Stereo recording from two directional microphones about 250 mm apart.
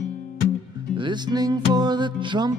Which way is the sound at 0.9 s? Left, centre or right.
Centre.